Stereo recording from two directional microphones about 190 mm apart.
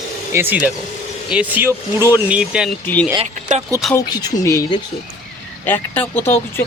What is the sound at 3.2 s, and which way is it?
Speech, 40° right (ahead or behind).